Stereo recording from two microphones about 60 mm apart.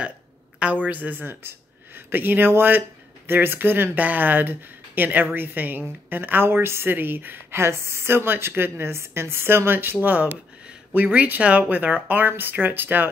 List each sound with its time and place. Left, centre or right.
0.8 s a woman's voice: right